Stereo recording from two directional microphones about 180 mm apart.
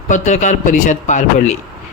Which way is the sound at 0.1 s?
45° left (ahead or behind).